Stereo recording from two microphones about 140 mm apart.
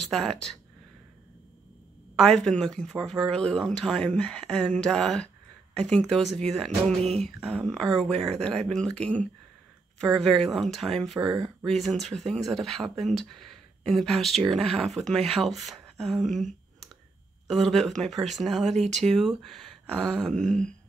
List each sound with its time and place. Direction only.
0.0 s speech: 5° left (ahead or behind)
2.1 s speech: 5° left (ahead or behind)
7.0 s a sound: 50° right (ahead or behind)
7.2 s speech: centre (ahead or behind)